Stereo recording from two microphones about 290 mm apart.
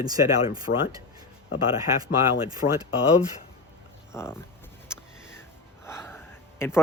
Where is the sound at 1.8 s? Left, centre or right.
Centre.